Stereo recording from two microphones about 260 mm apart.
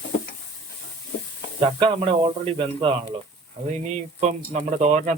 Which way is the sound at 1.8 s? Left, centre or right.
Right.